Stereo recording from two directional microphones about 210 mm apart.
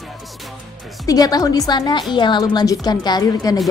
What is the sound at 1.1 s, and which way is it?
A woman's voice, 20° left (ahead or behind).